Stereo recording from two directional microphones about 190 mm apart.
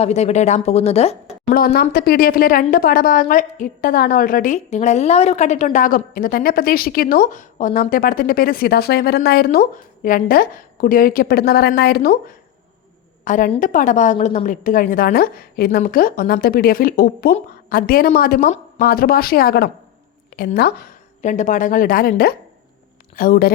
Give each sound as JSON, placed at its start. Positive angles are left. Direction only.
{"t": 0.0, "sound": "speech", "side_deg": 35}
{"t": 1.5, "sound": "speech", "side_deg": 50}
{"t": 13.2, "sound": "speech", "side_deg": 40}
{"t": 18.8, "sound": "a woman's voice", "side_deg": 55}